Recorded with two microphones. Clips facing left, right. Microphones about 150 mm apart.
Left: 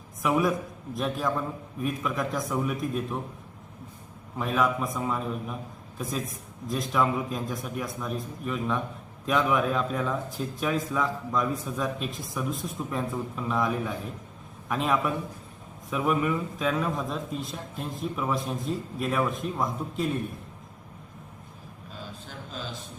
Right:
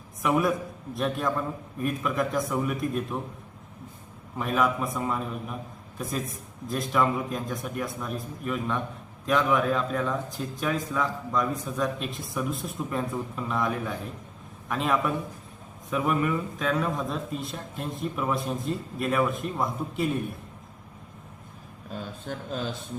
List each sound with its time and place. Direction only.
0.2 s a man's voice: centre (ahead or behind)
4.4 s a man's voice: centre (ahead or behind)
22.3 s speech: 50° right (ahead or behind)